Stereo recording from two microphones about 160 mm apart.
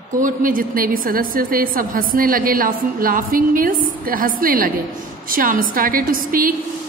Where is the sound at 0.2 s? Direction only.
60° right (ahead or behind).